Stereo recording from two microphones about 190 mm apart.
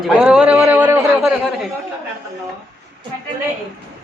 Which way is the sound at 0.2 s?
5° right (ahead or behind).